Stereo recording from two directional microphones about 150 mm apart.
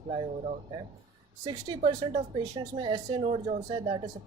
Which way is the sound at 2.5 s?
30° right (ahead or behind).